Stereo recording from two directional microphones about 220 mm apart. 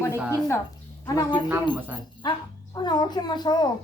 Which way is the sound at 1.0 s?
15° left (ahead or behind).